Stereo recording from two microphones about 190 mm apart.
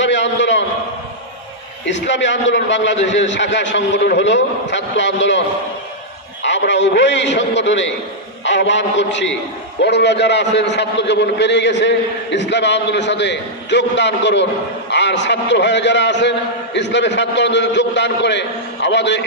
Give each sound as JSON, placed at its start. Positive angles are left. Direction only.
{"t": 0.0, "sound": "a sound", "side_deg": 70}
{"t": 1.9, "sound": "a man's voice", "side_deg": 70}
{"t": 6.4, "sound": "a man's voice", "side_deg": 70}